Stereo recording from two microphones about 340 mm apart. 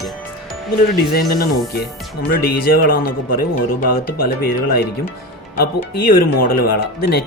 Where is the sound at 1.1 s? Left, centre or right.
Left.